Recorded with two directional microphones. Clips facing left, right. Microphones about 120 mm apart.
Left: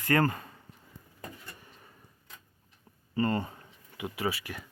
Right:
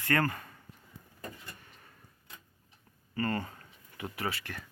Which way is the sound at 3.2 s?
20° left (ahead or behind).